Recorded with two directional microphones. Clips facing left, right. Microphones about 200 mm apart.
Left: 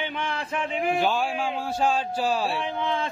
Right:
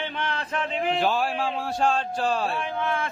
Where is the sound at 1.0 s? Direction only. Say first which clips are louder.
Even; centre (ahead or behind).